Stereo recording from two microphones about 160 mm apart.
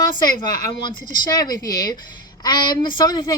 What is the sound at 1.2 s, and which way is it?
Speech, 25° left (ahead or behind).